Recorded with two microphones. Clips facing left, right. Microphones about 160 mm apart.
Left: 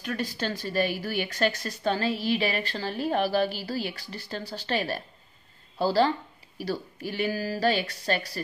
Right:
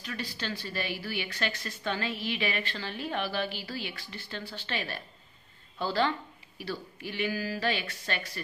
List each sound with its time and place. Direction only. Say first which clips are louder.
0.0 s a woman's voice: left 7 dB; 50° left (ahead or behind)